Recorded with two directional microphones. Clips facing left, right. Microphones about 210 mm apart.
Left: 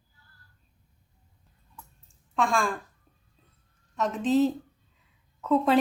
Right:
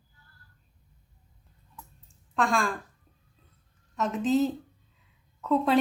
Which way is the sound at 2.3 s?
Centre (ahead or behind).